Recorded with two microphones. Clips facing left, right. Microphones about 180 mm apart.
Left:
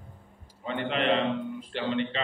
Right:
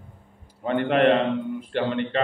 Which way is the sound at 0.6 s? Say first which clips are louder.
Right 8 dB; 55° right (ahead or behind).